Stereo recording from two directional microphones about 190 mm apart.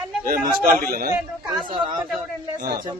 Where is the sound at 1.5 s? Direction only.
20° right (ahead or behind).